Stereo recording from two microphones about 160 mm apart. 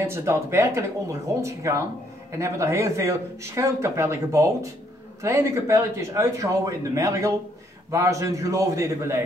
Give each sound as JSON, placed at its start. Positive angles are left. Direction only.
{"t": 0.0, "sound": "speech", "side_deg": -15}